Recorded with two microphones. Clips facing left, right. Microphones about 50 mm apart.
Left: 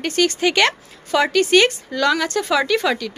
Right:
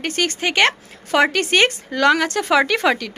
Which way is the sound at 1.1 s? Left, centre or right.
Right.